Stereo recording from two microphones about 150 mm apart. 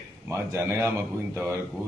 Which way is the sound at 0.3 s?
15° right (ahead or behind).